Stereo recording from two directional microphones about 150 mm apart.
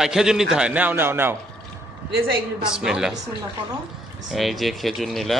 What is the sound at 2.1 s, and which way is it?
Speech, 90° right.